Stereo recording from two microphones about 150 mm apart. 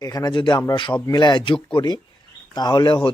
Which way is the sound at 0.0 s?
25° left (ahead or behind).